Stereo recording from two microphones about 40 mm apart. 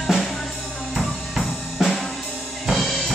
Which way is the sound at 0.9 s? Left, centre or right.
Centre.